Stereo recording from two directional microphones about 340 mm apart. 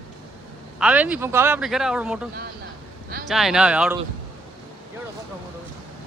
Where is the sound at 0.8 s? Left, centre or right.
Centre.